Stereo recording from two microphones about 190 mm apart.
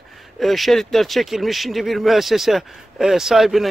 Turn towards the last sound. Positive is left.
turn(degrees=0)  # may be behind; listen again after turning